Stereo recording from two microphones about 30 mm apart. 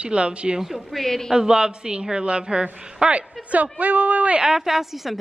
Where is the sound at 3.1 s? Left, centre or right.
Right.